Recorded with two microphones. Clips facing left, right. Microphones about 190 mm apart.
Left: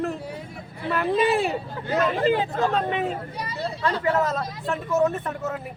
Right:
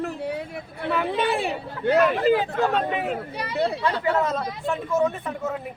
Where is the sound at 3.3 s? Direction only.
65° right (ahead or behind).